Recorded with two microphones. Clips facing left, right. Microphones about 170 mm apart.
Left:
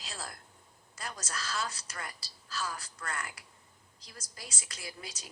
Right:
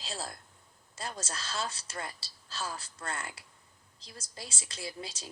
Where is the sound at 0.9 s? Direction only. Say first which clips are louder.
Right 2 dB; 30° right (ahead or behind).